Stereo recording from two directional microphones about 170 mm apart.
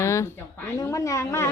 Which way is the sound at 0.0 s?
15° left (ahead or behind).